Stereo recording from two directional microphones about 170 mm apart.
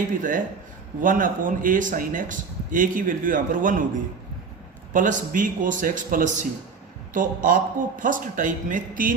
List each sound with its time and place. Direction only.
0.2 s speech: 50° right (ahead or behind)
4.9 s speech: 50° right (ahead or behind)